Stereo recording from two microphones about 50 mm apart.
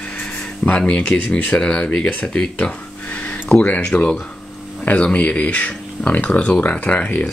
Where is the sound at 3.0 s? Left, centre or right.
Left.